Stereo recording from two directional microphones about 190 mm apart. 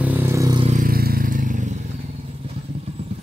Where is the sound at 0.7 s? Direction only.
45° right (ahead or behind).